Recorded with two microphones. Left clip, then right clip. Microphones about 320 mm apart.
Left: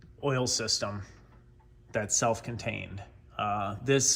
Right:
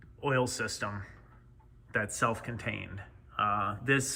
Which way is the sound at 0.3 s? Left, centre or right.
Centre.